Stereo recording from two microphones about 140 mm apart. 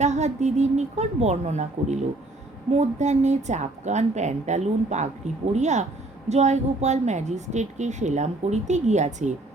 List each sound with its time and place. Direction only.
0.0 s a woman's voice: 55° right (ahead or behind)